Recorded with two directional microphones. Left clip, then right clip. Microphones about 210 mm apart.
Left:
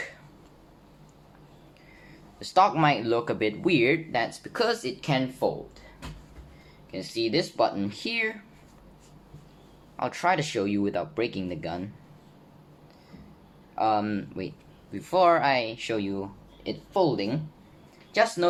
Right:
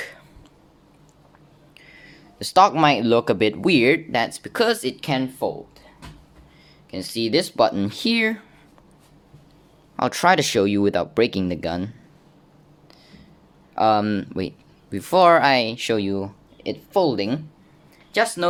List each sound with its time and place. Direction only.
1.9 s speech: 50° right (ahead or behind)
6.9 s speech: 50° right (ahead or behind)
10.0 s speech: 50° right (ahead or behind)
13.7 s speech: 50° right (ahead or behind)